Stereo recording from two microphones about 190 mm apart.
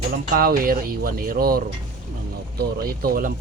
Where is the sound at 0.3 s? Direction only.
50° right (ahead or behind).